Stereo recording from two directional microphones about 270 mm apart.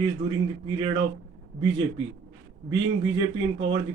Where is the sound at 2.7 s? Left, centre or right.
Centre.